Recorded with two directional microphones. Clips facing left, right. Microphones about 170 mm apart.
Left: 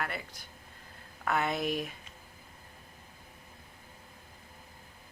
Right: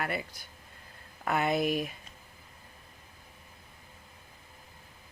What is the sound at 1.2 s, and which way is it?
Speech, 10° right (ahead or behind).